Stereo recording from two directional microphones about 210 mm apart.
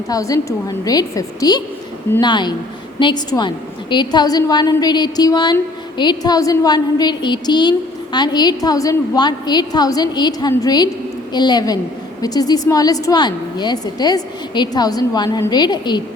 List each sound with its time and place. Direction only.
0.1 s a woman's voice: 15° left (ahead or behind)